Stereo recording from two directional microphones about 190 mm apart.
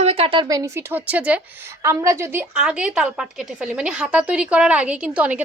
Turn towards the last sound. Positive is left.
turn(degrees=-5)  # may be behind; listen again after turning